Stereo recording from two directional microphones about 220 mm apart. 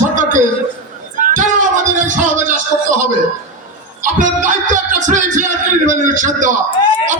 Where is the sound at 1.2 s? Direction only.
35° right (ahead or behind).